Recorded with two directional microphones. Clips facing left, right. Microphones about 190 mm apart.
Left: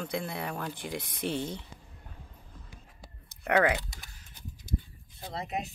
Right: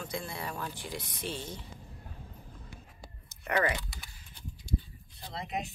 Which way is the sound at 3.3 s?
60° left (ahead or behind).